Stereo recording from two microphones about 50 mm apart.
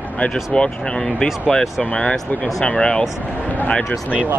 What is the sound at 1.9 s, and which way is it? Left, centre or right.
Speech, left.